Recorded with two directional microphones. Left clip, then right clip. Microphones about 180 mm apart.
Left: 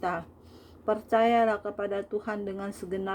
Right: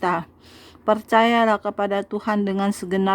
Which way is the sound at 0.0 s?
35° right (ahead or behind).